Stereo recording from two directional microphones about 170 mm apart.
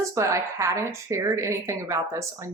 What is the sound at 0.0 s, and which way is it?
A woman's voice, 20° right (ahead or behind).